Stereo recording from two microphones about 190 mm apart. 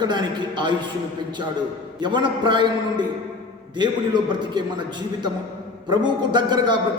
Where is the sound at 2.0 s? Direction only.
25° right (ahead or behind).